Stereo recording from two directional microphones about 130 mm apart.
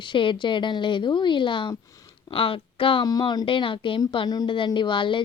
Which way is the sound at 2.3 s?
45° left (ahead or behind).